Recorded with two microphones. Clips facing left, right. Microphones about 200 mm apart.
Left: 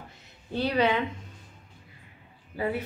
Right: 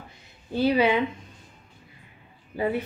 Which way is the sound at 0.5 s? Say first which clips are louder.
Right 4 dB; 5° right (ahead or behind).